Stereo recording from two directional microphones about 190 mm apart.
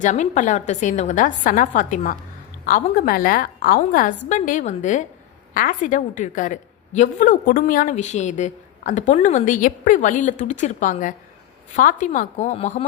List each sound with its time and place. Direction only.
0.0 s a woman's voice: 40° left (ahead or behind)